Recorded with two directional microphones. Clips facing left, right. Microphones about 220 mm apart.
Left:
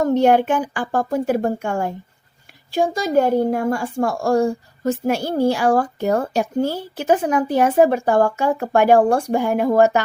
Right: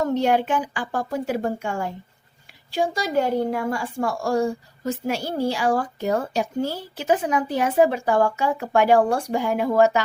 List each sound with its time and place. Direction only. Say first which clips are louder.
0.0 s a woman's voice: left 5 dB; 50° left (ahead or behind)